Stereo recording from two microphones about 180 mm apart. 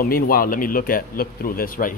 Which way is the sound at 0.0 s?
55° left (ahead or behind).